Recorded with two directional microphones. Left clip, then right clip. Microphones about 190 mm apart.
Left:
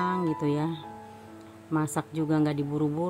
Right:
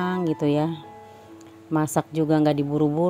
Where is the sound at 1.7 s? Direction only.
25° right (ahead or behind).